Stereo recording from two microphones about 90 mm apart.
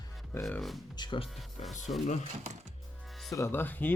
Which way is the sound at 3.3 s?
30° left (ahead or behind).